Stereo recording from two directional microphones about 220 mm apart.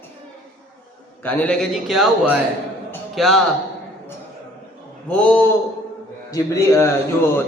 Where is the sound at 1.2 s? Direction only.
5° left (ahead or behind).